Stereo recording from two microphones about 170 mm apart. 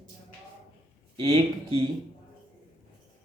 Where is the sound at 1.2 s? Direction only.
40° right (ahead or behind).